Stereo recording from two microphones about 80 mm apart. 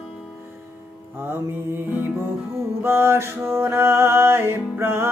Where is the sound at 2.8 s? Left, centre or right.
Right.